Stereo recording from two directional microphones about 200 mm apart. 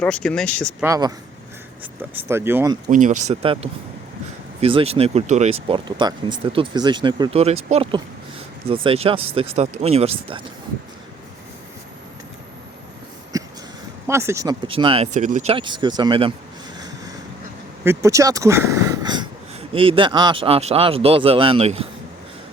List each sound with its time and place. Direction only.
0.0 s speech: 5° left (ahead or behind)
0.8 s speech: 15° right (ahead or behind)
2.9 s speech: 40° right (ahead or behind)
13.3 s a sound: 15° right (ahead or behind)
14.1 s speech: 15° right (ahead or behind)
17.8 s speech: 15° right (ahead or behind); by 21.8 s 30° right (ahead or behind)